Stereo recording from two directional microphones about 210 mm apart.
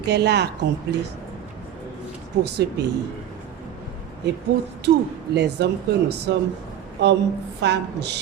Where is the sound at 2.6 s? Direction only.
55° right (ahead or behind).